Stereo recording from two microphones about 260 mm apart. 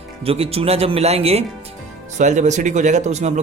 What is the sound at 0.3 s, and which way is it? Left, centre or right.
A man's voice, right.